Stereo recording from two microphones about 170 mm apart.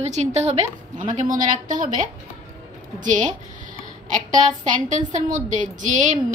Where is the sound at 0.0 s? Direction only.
40° right (ahead or behind).